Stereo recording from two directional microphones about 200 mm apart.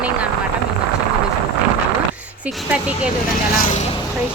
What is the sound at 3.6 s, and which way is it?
Speech, 40° left (ahead or behind).